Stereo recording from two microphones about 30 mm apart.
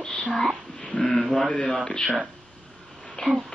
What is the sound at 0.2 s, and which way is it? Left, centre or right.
Whispering, left.